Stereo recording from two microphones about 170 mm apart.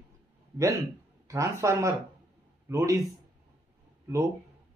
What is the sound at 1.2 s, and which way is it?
Speech, 20° right (ahead or behind).